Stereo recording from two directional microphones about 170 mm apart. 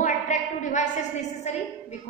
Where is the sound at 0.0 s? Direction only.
45° left (ahead or behind).